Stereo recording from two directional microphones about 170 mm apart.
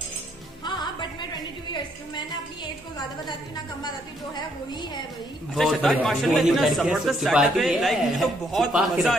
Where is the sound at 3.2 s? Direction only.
25° left (ahead or behind).